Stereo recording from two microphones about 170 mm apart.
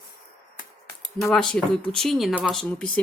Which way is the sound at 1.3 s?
5° left (ahead or behind).